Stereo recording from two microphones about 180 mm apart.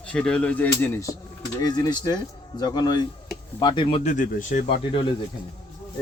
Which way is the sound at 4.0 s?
45° left (ahead or behind).